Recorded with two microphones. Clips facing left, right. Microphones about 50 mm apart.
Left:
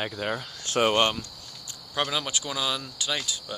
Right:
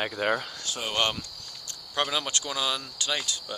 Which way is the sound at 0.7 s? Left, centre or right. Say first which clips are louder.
Left 12 dB; left.